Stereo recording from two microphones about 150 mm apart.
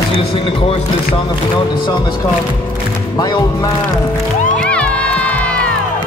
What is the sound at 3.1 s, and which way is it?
Speech, 25° left (ahead or behind).